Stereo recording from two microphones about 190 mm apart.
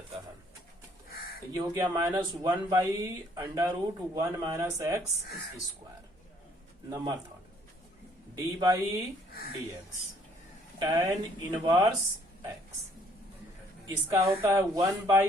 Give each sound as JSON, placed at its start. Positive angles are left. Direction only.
{"t": 1.5, "sound": "speech", "side_deg": -20}
{"t": 6.9, "sound": "speech", "side_deg": -20}
{"t": 8.5, "sound": "speech", "side_deg": -20}
{"t": 10.8, "sound": "speech", "side_deg": -20}
{"t": 13.8, "sound": "speech", "side_deg": -15}